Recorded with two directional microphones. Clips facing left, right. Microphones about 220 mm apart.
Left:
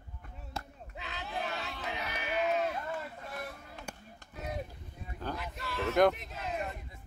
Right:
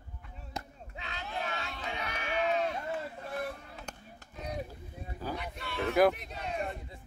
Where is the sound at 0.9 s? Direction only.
Centre (ahead or behind).